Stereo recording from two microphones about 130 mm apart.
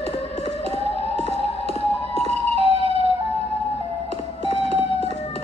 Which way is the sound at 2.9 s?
45° left (ahead or behind).